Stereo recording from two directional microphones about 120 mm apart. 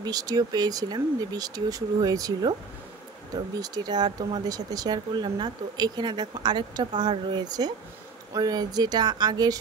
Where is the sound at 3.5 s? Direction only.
35° right (ahead or behind).